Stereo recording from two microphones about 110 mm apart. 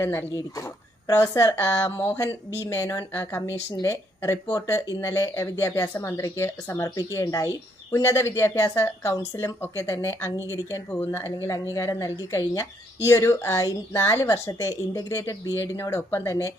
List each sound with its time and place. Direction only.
0.0 s speech: 20° left (ahead or behind)